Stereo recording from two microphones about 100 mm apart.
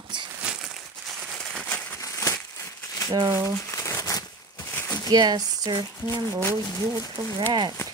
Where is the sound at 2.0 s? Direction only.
30° left (ahead or behind).